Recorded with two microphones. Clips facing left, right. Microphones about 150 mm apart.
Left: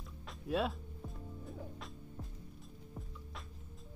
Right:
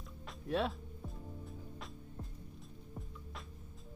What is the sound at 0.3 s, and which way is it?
Music, centre (ahead or behind).